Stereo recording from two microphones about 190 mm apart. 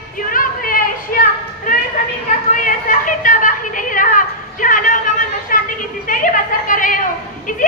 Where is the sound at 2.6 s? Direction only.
45° left (ahead or behind).